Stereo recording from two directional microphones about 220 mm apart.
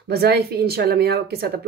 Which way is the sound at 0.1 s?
45° right (ahead or behind).